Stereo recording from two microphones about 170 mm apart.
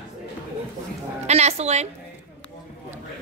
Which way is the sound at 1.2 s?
40° right (ahead or behind).